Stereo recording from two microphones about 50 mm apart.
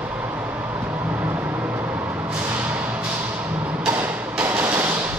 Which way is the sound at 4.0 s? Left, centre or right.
Right.